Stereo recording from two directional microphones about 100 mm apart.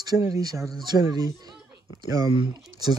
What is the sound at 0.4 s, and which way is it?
Speech, 40° right (ahead or behind).